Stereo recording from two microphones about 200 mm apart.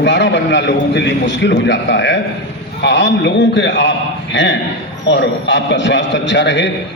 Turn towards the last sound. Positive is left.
turn(degrees=60)  # may be behind; listen again after turning